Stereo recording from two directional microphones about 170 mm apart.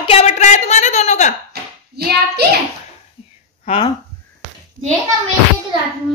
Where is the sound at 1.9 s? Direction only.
70° right (ahead or behind).